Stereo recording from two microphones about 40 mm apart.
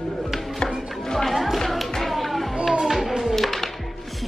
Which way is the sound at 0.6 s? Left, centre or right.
Centre.